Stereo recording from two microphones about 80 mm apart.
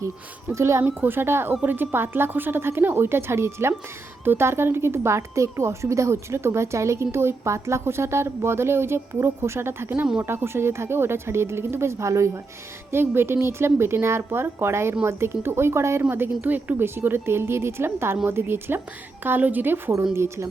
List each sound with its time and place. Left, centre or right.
0.5 s a woman's voice: right